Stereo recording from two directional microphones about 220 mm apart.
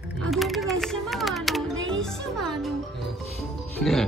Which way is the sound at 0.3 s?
Centre (ahead or behind).